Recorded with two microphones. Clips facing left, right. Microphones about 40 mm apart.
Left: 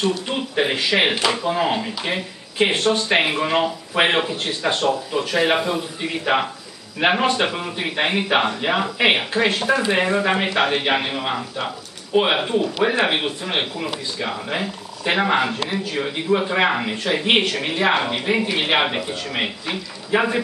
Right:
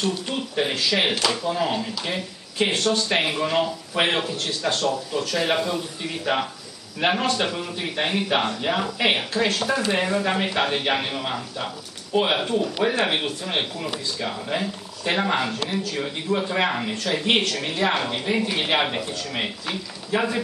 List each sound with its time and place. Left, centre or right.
0.3 s speech: left